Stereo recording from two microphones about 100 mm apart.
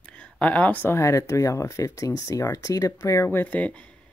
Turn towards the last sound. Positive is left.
turn(degrees=15)  # may be behind; listen again after turning